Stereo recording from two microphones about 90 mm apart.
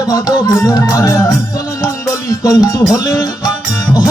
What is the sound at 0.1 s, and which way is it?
Music, 45° left (ahead or behind).